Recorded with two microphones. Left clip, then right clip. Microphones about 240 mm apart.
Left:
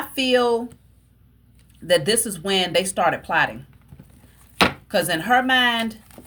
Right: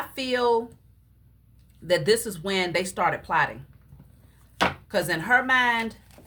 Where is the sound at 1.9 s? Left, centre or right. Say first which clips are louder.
Left 3 dB; centre.